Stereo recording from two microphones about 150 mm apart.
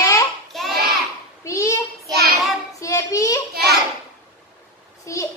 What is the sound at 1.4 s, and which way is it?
Child singing, 20° left (ahead or behind).